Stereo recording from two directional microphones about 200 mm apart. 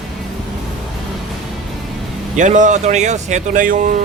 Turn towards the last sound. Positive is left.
turn(degrees=-35)  # may be behind; listen again after turning